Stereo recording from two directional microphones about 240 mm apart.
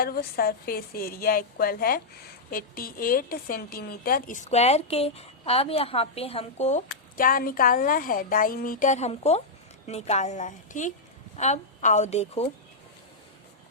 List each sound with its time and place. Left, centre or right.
0.0 s a woman's voice: left